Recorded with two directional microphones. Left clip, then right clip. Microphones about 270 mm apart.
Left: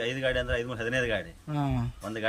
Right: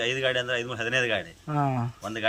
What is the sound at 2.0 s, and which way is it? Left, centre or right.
Speech, centre.